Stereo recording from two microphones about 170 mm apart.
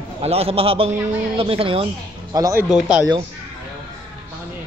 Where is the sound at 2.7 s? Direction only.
5° right (ahead or behind).